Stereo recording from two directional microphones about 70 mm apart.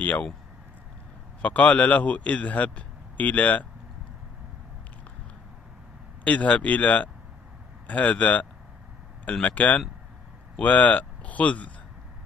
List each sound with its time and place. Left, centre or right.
1.4 s speech: centre
6.2 s speech: centre